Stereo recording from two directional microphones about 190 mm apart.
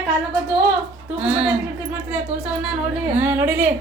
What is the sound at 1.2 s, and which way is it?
Speech, 5° right (ahead or behind).